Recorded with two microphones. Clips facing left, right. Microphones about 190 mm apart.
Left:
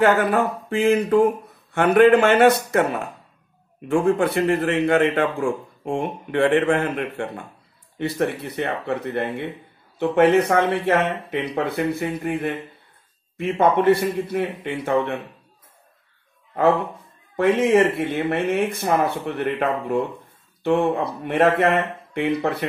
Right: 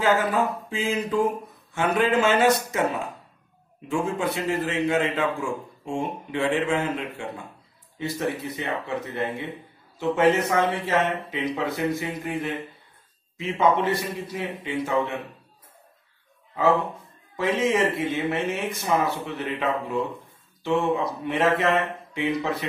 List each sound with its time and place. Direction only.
0.0 s a man's voice: 65° left (ahead or behind)
13.6 s a man's voice: 60° left (ahead or behind)
17.4 s a man's voice: 60° left (ahead or behind)